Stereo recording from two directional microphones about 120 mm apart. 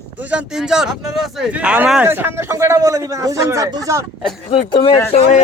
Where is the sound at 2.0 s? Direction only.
20° right (ahead or behind).